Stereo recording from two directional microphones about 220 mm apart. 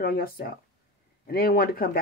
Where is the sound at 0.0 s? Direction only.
45° left (ahead or behind).